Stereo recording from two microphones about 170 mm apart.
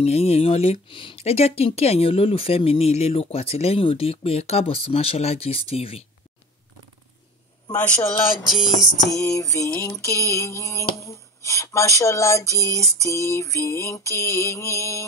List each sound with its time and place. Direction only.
0.0 s speech: 35° left (ahead or behind)
7.7 s mantra: 10° left (ahead or behind)
9.1 s mantra: 20° left (ahead or behind)